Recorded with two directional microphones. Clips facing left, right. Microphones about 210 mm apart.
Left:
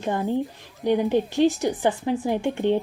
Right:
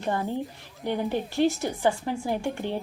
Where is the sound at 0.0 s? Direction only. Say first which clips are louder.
Left 4 dB; 15° left (ahead or behind).